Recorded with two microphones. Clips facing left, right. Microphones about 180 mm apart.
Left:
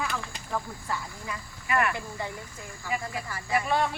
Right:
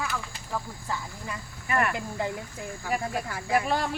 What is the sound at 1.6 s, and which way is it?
Speech, 35° right (ahead or behind).